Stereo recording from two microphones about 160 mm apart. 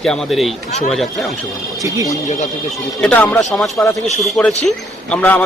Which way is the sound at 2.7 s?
5° left (ahead or behind).